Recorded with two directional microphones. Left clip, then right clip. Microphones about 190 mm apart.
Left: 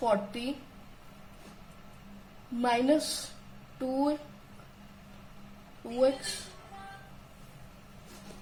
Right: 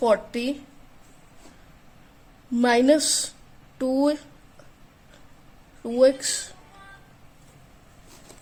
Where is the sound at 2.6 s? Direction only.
60° right (ahead or behind).